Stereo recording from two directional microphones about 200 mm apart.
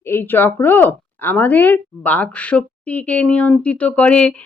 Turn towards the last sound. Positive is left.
turn(degrees=5)  # may be behind; listen again after turning